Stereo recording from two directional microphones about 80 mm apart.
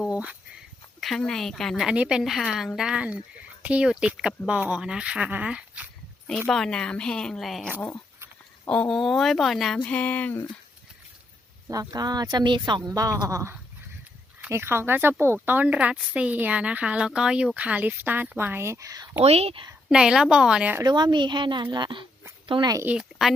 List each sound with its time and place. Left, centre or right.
0.1 s a sound: centre
1.2 s speech: centre
1.7 s speech: centre
6.5 s a woman's voice: centre
7.8 s a sound: left
8.7 s a woman's voice: centre
9.0 s speech: centre
9.8 s a sound: centre
11.7 s speech: right
14.5 s a woman's voice: right
19.9 s speech: centre
20.8 s a woman's voice: right
22.4 s speech: right
22.9 s speech: centre